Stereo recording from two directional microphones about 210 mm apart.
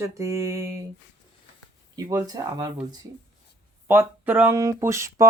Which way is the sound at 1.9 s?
20° right (ahead or behind).